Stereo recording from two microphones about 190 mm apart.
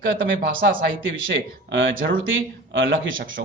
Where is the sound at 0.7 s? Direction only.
75° right (ahead or behind); by 3.4 s 90° right.